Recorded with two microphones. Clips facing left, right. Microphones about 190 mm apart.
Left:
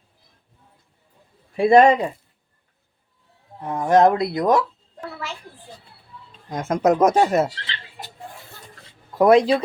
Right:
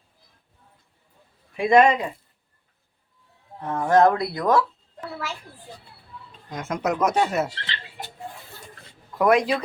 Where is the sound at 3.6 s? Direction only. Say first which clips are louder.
Left 2 dB; 10° left (ahead or behind).